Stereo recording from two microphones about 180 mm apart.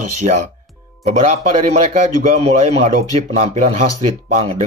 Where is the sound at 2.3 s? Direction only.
35° right (ahead or behind).